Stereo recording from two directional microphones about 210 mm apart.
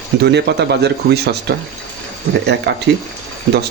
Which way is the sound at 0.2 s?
50° right (ahead or behind).